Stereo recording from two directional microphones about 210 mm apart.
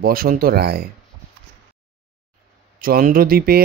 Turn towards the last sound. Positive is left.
turn(degrees=-45)  # may be behind; listen again after turning